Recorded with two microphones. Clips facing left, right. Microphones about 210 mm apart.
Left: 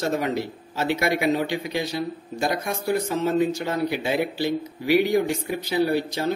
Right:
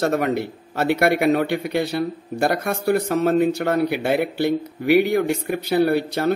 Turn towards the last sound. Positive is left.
turn(degrees=-60)  # may be behind; listen again after turning